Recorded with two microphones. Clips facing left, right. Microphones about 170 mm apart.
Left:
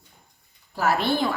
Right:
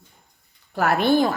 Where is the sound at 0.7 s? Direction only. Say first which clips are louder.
Right 4 dB; 60° right (ahead or behind).